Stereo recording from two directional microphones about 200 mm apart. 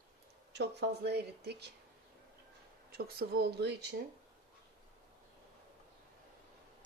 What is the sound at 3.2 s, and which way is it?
Speech, 50° right (ahead or behind).